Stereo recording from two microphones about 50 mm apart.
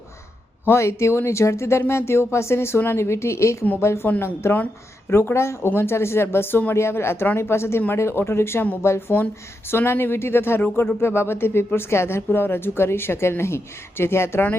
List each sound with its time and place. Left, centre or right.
0.8 s a woman's voice: left
3.8 s a woman's voice: left
9.0 s speech: left